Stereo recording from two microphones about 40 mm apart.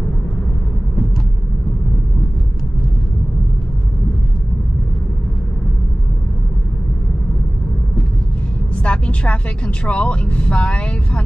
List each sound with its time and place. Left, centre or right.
8.8 s speech: left